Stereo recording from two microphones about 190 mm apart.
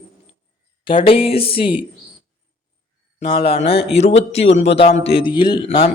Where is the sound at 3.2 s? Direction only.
30° left (ahead or behind).